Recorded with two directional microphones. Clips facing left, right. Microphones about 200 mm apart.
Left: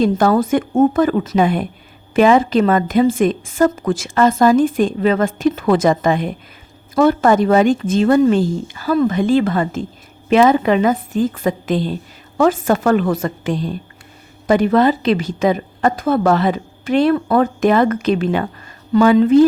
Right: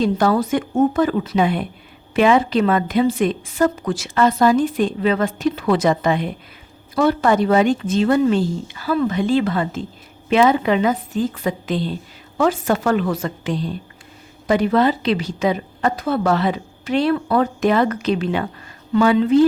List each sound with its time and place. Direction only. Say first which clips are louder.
0.0 s a woman's voice: left 3 dB; 50° left (ahead or behind)